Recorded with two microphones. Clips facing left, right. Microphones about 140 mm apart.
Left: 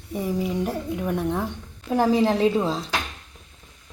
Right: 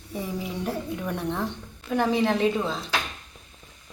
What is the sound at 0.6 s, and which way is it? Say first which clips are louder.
Speech: left 3 dB; 10° left (ahead or behind).